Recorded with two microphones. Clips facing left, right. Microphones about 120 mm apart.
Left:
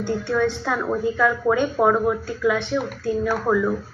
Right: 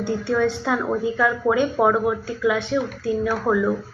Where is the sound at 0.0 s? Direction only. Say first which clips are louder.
Right 1 dB; 15° right (ahead or behind).